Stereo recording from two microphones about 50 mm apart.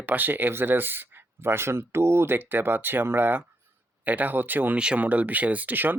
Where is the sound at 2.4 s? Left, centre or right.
Right.